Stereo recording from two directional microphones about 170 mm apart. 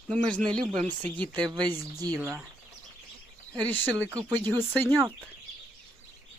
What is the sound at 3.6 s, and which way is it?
Speech, 10° left (ahead or behind).